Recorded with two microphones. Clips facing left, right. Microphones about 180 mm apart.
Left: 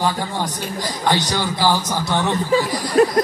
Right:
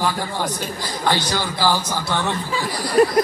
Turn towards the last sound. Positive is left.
turn(degrees=0)  # may be behind; listen again after turning